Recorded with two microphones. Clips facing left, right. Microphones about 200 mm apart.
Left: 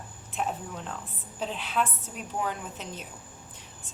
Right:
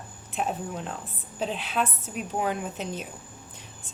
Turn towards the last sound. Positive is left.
turn(degrees=-20)  # may be behind; listen again after turning